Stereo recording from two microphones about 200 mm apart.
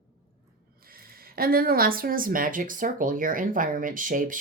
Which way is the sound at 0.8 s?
50° right (ahead or behind).